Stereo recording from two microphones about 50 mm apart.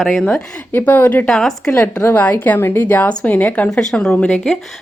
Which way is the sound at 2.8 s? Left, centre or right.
Left.